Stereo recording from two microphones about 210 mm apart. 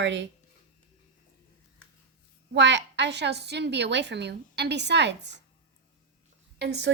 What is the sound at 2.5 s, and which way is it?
A woman's voice, 55° right (ahead or behind).